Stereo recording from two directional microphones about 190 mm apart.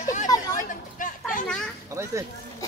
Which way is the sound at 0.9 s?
45° left (ahead or behind).